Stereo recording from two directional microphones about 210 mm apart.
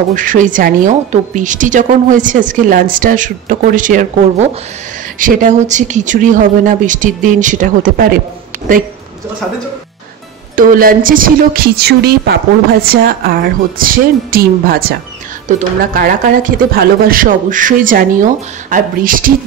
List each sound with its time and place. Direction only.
0.1 s a woman's voice: 40° right (ahead or behind)
10.5 s a woman's voice: 40° right (ahead or behind)